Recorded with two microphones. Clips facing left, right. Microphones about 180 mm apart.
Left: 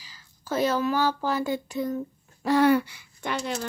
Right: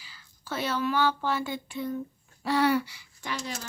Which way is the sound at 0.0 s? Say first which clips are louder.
Left 1 dB; 40° left (ahead or behind).